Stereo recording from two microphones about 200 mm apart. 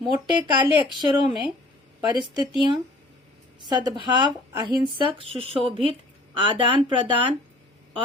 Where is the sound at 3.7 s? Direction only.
20° right (ahead or behind).